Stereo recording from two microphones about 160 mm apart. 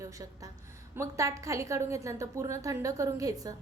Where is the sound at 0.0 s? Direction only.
20° right (ahead or behind).